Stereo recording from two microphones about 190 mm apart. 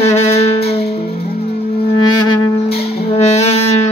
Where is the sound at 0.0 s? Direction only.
35° left (ahead or behind).